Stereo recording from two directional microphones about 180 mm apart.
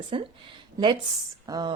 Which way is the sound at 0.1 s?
30° right (ahead or behind).